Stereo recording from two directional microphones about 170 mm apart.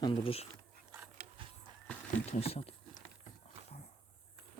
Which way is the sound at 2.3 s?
35° left (ahead or behind).